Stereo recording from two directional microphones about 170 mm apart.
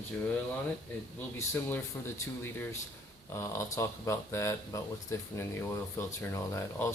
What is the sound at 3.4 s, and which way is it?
Speech, 15° left (ahead or behind).